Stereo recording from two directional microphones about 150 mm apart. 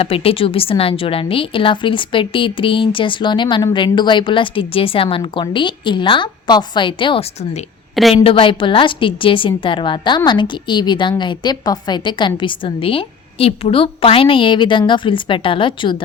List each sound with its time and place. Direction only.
0.0 s a woman's voice: 40° left (ahead or behind)